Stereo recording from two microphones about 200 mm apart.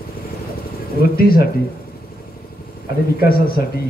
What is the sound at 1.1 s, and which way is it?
Speech, 50° left (ahead or behind).